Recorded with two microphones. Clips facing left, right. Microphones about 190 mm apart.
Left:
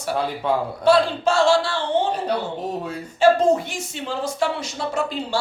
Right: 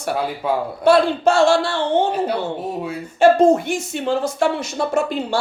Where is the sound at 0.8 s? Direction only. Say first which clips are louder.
Right 4 dB; 55° right (ahead or behind).